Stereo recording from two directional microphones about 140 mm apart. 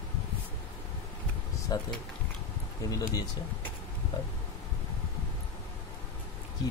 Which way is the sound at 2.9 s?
30° left (ahead or behind).